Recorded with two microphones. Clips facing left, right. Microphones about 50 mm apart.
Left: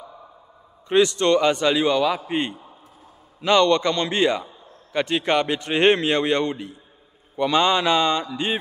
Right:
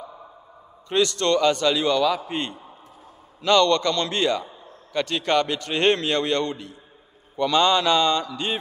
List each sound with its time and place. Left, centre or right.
0.8 s a man's voice: left